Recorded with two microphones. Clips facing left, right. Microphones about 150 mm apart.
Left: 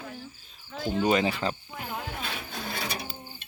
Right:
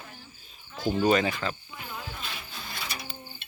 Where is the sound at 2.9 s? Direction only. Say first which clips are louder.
Left 3 dB; 35° left (ahead or behind).